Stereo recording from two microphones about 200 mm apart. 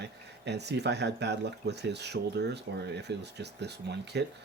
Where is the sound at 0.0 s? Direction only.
55° right (ahead or behind).